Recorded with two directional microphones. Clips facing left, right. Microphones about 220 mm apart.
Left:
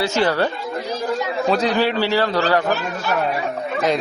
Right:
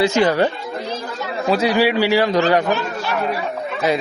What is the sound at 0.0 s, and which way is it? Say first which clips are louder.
A man's voice: right 3 dB; 15° right (ahead or behind).